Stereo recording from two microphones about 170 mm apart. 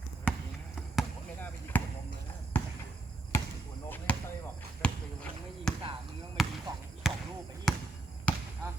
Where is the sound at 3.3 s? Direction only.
15° left (ahead or behind).